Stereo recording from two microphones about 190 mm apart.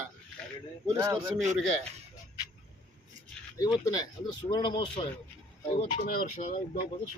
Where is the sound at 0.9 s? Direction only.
15° right (ahead or behind).